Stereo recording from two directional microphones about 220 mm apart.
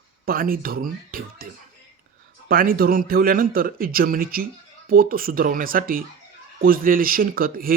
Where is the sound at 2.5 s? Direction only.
40° right (ahead or behind).